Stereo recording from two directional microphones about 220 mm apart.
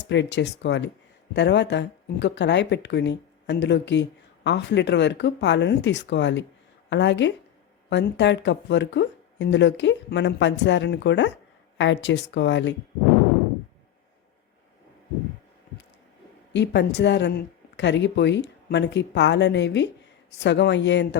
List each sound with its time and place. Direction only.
0.0 s a woman's voice: 55° left (ahead or behind)
16.5 s a woman's voice: 55° left (ahead or behind)